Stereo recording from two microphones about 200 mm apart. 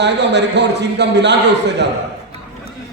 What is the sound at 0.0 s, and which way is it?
A man's voice, 60° right (ahead or behind).